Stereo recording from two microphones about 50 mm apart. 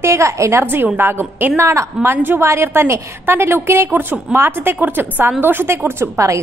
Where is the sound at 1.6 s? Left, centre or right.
Right.